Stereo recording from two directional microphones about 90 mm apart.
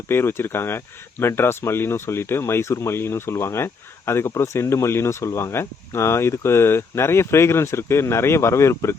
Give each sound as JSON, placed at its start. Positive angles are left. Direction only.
{"t": 0.1, "sound": "speech", "side_deg": 25}